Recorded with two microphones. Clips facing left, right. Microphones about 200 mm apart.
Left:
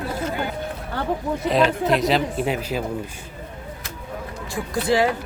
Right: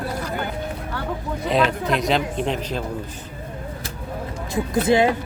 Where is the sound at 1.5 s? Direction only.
Centre (ahead or behind).